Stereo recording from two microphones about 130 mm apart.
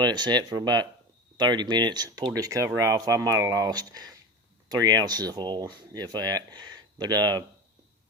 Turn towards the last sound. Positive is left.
turn(degrees=-30)  # may be behind; listen again after turning